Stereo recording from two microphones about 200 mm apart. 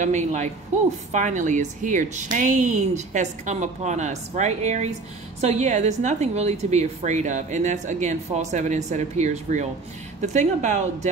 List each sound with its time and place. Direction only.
0.0 s a woman's voice: 35° right (ahead or behind)